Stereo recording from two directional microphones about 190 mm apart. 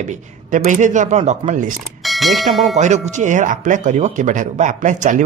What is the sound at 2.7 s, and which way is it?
Speech, 35° right (ahead or behind).